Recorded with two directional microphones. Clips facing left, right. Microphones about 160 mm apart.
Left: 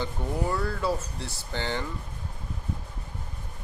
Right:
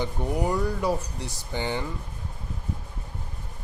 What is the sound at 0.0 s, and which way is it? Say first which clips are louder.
Speech: right 3 dB; 15° right (ahead or behind).